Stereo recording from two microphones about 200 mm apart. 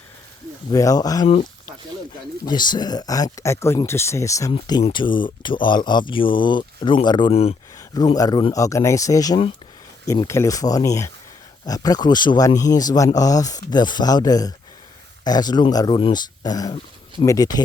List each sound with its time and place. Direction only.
0.7 s speech: 20° left (ahead or behind)
2.5 s speech: 20° left (ahead or behind)